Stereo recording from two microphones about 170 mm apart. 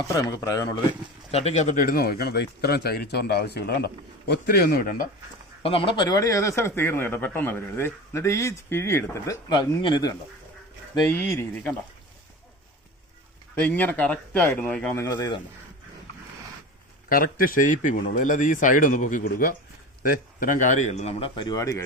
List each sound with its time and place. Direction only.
0.1 s speech: 20° left (ahead or behind)
1.3 s speech: 40° left (ahead or behind); by 5.0 s 55° left (ahead or behind)
5.6 s a man's voice: 30° left (ahead or behind)
11.0 s a man's voice: 5° left (ahead or behind)
13.6 s a man's voice: 10° left (ahead or behind)
17.1 s a man's voice: 55° left (ahead or behind); by 21.8 s 20° left (ahead or behind)